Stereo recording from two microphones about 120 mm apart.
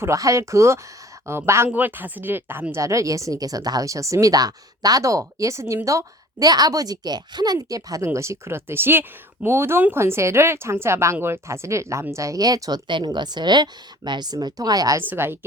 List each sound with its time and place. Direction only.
0.0 s speech: 25° right (ahead or behind)
15.0 s speech: 20° right (ahead or behind)